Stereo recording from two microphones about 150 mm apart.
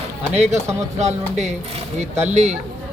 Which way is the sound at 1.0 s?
50° right (ahead or behind).